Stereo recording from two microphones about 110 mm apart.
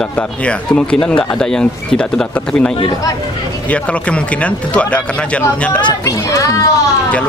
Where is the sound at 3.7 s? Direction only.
10° left (ahead or behind).